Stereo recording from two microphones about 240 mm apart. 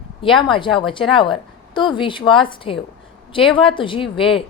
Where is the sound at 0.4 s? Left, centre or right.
Left.